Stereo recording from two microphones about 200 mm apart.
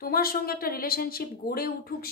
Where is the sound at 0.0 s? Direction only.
50° left (ahead or behind).